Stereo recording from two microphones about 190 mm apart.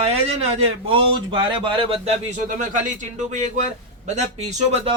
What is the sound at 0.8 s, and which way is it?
Speech, 25° right (ahead or behind).